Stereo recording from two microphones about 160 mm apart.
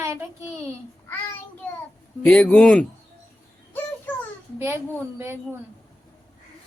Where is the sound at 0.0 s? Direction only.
20° right (ahead or behind).